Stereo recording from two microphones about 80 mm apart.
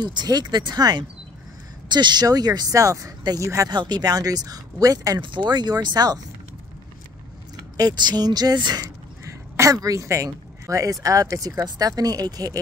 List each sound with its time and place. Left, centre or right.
0.0 s speech: right
2.2 s speech: right
3.6 s speech: right
5.2 s speech: right
7.7 s speech: right
9.2 s speech: right